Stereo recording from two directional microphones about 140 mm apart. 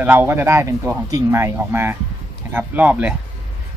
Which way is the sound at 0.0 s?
15° right (ahead or behind).